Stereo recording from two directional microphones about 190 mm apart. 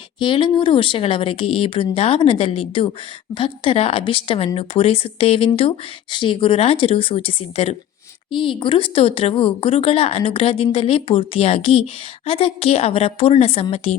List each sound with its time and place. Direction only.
0.2 s speech: 25° left (ahead or behind)